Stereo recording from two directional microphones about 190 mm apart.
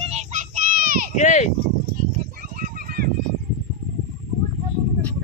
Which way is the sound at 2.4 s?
50° right (ahead or behind).